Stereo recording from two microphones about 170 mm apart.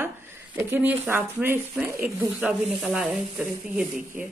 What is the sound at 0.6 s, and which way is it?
A woman's voice, 10° right (ahead or behind).